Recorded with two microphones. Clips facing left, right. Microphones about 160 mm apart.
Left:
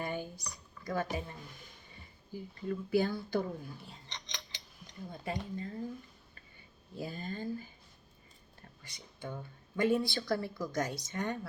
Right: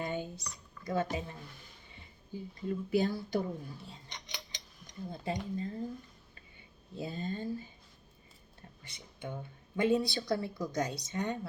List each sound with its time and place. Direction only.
0.0 s a sound: 25° right (ahead or behind)
0.9 s speech: 25° right (ahead or behind)
4.1 s a sound: 15° right (ahead or behind)
5.2 s speech: 25° right (ahead or behind)
6.9 s speech: 25° right (ahead or behind)
8.8 s speech: 20° right (ahead or behind)